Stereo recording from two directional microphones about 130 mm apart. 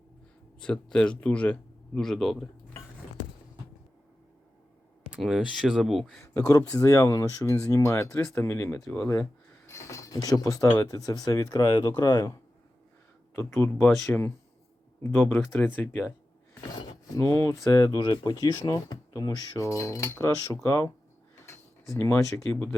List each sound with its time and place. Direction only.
0.6 s speech: 5° left (ahead or behind)
5.1 s speech: centre (ahead or behind)
6.2 s speech: 25° left (ahead or behind)
13.3 s speech: 15° left (ahead or behind)
17.2 s speech: 25° left (ahead or behind)
21.3 s a sound: 20° left (ahead or behind)